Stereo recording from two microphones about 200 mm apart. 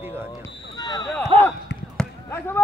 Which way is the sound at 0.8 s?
20° left (ahead or behind).